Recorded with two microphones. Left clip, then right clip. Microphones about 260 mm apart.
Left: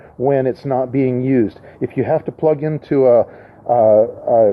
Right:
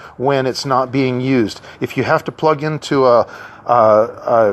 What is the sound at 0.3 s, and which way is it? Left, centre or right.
Speech, centre.